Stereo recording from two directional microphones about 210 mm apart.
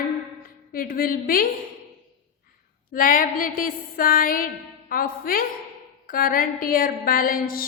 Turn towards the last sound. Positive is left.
turn(degrees=45)  # may be behind; listen again after turning